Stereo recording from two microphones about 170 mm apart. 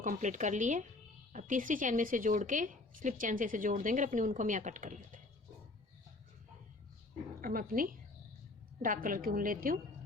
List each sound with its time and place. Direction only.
0.0 s a woman's voice: 50° right (ahead or behind)
7.4 s a woman's voice: 55° right (ahead or behind)